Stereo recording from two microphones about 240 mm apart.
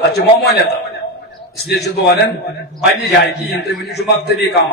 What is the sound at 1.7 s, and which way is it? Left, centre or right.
A man's voice, left.